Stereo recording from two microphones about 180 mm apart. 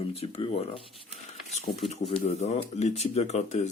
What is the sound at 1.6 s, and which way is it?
Speech, 35° left (ahead or behind).